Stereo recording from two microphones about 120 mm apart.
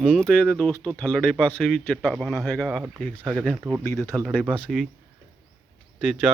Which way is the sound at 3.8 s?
20° left (ahead or behind).